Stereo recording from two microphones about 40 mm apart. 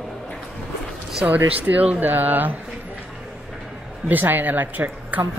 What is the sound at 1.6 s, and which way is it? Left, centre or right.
A woman's voice, right.